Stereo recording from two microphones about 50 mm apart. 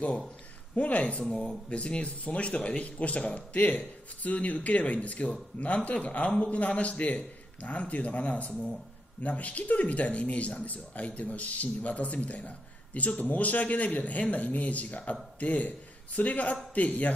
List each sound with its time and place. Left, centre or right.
0.7 s speech: left
1.2 s speech: centre
1.7 s speech: left